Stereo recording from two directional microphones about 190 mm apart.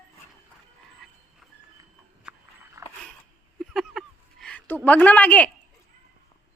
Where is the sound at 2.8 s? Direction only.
15° right (ahead or behind).